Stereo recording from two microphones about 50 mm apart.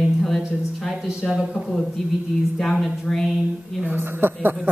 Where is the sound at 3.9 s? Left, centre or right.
Right.